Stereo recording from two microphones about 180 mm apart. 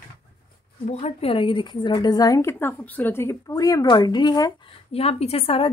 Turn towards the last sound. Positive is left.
turn(degrees=35)  # may be behind; listen again after turning